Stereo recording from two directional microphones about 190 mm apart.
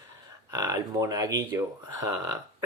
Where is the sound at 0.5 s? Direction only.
20° right (ahead or behind).